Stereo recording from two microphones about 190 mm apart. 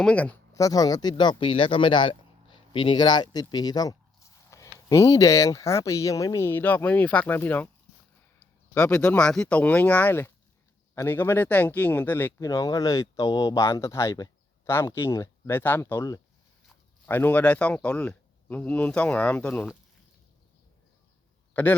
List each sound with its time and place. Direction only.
0.0 s speech: 5° left (ahead or behind); by 3.4 s 20° left (ahead or behind)
3.4 s a sound: 20° left (ahead or behind)
4.9 s speech: 15° left (ahead or behind)
8.7 s speech: 5° left (ahead or behind)
21.5 s a man's voice: 10° left (ahead or behind)